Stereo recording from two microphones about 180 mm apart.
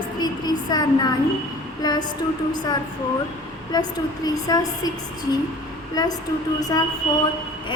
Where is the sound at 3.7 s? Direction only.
20° left (ahead or behind).